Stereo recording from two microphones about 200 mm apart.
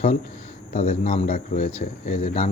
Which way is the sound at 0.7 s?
35° left (ahead or behind).